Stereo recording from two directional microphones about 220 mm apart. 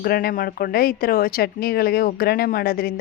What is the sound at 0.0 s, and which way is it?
A woman's voice, 45° left (ahead or behind).